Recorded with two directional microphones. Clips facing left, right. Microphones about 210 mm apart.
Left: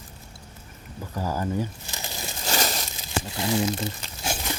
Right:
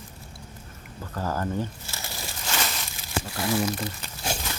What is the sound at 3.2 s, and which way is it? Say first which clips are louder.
Speech: left 1 dB; 20° left (ahead or behind).